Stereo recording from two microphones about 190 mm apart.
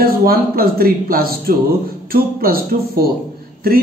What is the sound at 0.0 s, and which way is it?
Speech, 50° right (ahead or behind).